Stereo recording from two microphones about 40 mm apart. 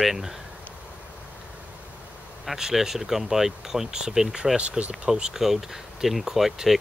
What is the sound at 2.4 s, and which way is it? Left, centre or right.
Speech, centre.